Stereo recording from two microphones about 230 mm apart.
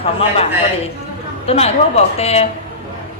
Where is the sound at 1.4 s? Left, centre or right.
Left.